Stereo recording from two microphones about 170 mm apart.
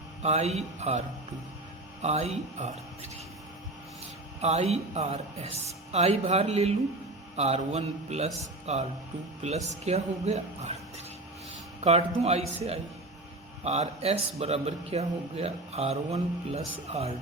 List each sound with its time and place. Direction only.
0.2 s a man's voice: 40° right (ahead or behind)
4.4 s a man's voice: 40° right (ahead or behind)
8.6 s music: 40° right (ahead or behind)
9.4 s a man's voice: 40° right (ahead or behind)